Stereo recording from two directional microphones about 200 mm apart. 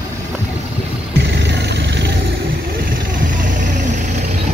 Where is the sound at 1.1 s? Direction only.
60° right (ahead or behind).